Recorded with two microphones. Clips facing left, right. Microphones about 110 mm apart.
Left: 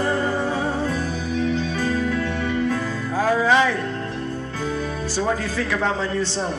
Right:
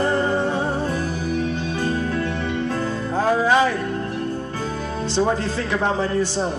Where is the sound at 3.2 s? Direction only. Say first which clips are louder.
Even; 20° right (ahead or behind).